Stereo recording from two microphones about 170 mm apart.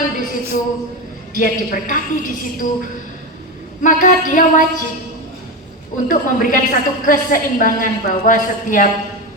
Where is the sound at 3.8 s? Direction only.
50° left (ahead or behind).